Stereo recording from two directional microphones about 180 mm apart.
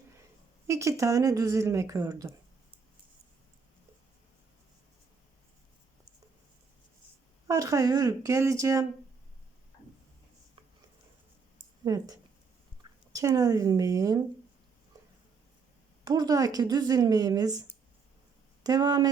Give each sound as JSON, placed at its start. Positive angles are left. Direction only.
{"t": 0.7, "sound": "speech", "side_deg": -15}
{"t": 7.4, "sound": "speech", "side_deg": -20}
{"t": 11.9, "sound": "a woman's voice", "side_deg": -20}
{"t": 16.0, "sound": "a woman's voice", "side_deg": -20}
{"t": 18.6, "sound": "a woman's voice", "side_deg": -20}